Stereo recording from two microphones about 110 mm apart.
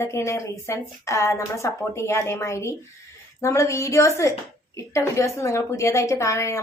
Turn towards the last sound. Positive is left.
turn(degrees=25)  # may be behind; listen again after turning